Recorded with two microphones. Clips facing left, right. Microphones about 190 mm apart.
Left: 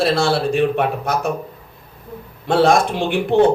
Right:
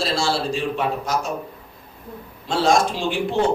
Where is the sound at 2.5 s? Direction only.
60° left (ahead or behind).